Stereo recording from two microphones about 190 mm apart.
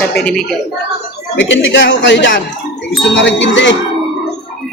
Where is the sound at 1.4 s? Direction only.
70° left (ahead or behind).